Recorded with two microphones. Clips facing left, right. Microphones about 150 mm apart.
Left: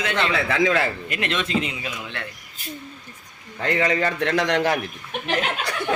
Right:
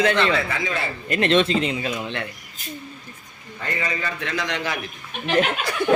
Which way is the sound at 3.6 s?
75° left (ahead or behind).